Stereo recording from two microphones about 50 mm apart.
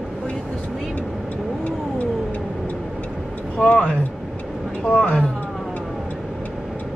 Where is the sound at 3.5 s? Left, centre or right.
Left.